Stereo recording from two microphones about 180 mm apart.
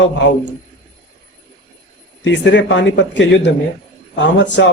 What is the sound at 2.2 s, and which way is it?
Speech, 85° left.